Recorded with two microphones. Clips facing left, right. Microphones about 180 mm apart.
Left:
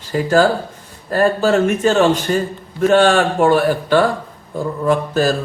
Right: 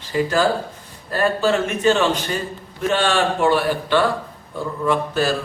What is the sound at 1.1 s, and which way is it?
A man's voice, 45° left (ahead or behind).